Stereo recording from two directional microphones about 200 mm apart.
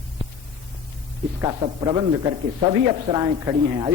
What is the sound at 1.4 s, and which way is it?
Speech, 25° right (ahead or behind).